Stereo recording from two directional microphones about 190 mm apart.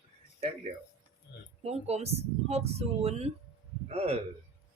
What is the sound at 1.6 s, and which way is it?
Speech, 35° right (ahead or behind).